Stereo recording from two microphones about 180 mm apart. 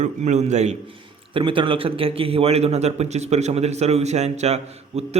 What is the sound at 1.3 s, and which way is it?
A man's voice, 30° right (ahead or behind).